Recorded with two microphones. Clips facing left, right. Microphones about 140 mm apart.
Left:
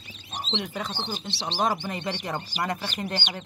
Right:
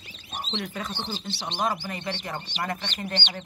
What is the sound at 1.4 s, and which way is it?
Speech, 30° left (ahead or behind).